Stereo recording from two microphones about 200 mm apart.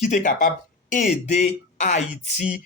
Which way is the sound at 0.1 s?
40° left (ahead or behind).